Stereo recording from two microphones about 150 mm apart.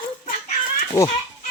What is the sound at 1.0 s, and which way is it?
Speech, 20° left (ahead or behind).